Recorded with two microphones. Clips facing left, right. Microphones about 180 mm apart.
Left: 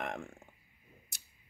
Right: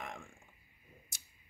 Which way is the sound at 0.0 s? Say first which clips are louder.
Left 7 dB; 60° left (ahead or behind).